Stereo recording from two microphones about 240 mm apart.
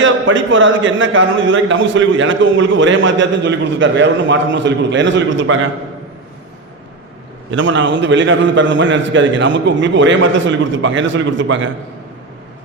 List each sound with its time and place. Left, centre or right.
0.0 s a man's voice: right
7.5 s a man's voice: right